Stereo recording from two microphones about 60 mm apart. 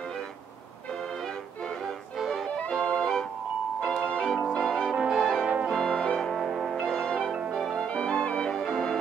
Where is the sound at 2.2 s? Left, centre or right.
Centre.